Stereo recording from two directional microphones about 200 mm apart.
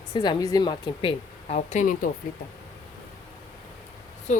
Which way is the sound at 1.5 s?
35° left (ahead or behind).